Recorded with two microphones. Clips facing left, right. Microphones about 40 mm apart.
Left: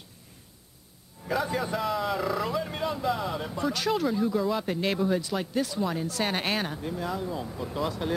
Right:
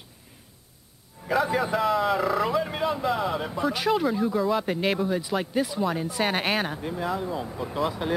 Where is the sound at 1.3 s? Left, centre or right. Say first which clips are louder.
Right 4 dB; centre.